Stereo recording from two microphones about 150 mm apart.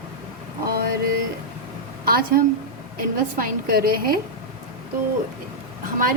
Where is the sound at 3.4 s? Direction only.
80° right.